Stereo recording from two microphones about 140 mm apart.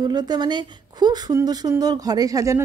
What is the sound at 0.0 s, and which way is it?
Speech, 30° right (ahead or behind).